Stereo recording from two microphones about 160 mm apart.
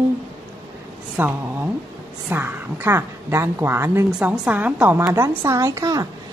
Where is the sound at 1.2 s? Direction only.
10° right (ahead or behind).